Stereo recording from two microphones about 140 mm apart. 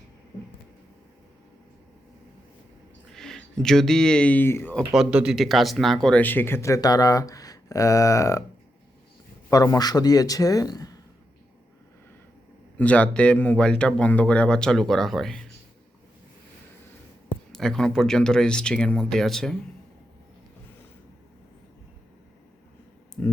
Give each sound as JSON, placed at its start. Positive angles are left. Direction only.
{"t": 3.1, "sound": "speech", "side_deg": 5}
{"t": 4.9, "sound": "speech", "side_deg": -5}
{"t": 9.5, "sound": "speech", "side_deg": 25}
{"t": 12.7, "sound": "speech", "side_deg": 10}
{"t": 17.5, "sound": "speech", "side_deg": 5}
{"t": 23.2, "sound": "speech", "side_deg": 10}